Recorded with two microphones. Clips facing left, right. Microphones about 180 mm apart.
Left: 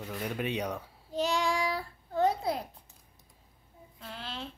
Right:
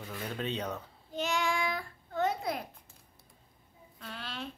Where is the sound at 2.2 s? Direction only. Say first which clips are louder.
Left 4 dB; 30° left (ahead or behind).